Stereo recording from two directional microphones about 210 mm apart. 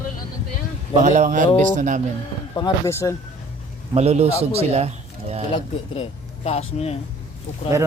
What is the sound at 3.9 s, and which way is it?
A man's voice, 30° right (ahead or behind).